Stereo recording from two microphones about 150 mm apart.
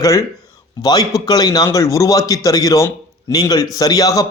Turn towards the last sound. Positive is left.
turn(degrees=25)  # may be behind; listen again after turning